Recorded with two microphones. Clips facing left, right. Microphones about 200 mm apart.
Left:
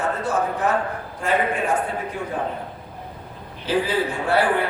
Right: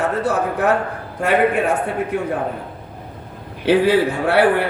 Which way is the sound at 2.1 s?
65° right (ahead or behind).